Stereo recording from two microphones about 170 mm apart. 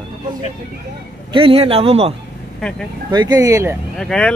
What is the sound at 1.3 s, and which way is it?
Speech, 35° right (ahead or behind).